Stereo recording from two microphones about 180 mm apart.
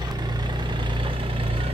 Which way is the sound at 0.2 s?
25° right (ahead or behind).